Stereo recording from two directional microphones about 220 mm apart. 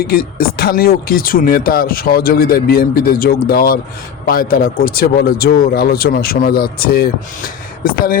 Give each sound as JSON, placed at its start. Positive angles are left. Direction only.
{"t": 0.0, "sound": "speech", "side_deg": 45}